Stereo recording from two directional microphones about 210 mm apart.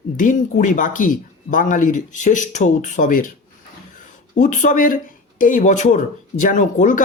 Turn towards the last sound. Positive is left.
turn(degrees=35)  # may be behind; listen again after turning